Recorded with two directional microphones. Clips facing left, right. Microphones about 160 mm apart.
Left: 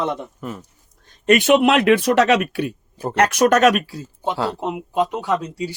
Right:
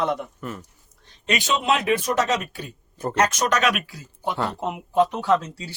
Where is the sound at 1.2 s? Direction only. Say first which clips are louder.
Left 10 dB; 55° left (ahead or behind).